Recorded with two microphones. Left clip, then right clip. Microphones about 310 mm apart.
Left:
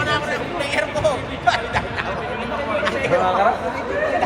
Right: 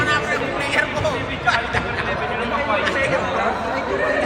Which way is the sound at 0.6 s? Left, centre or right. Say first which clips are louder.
Left 3 dB; left.